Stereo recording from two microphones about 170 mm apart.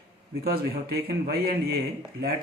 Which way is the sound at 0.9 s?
70° right (ahead or behind).